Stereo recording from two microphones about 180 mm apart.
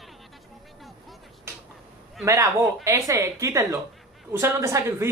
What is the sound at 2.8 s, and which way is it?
Speech, 15° right (ahead or behind).